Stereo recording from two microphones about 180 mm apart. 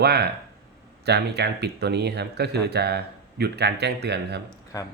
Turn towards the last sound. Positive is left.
turn(degrees=20)  # may be behind; listen again after turning